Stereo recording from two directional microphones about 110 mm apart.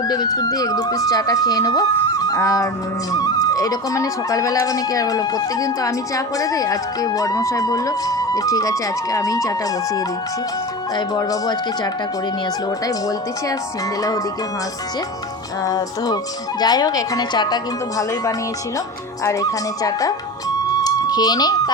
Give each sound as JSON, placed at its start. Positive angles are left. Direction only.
{"t": 0.0, "sound": "speech", "side_deg": 35}
{"t": 15.6, "sound": "speech", "side_deg": 35}
{"t": 20.7, "sound": "music", "side_deg": 35}